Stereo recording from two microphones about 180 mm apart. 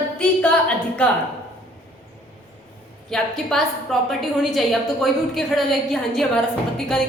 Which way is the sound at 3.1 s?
Centre (ahead or behind).